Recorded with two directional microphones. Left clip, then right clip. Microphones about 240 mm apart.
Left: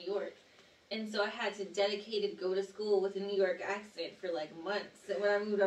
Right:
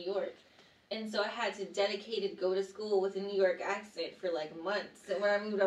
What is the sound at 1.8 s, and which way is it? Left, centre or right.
Speech, centre.